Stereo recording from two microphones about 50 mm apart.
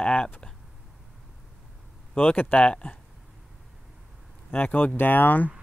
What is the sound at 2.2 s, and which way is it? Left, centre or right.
Speech, left.